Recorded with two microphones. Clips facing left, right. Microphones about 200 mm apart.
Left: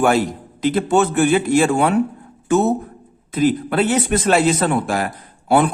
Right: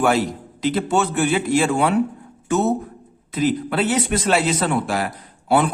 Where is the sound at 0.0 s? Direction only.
50° left (ahead or behind).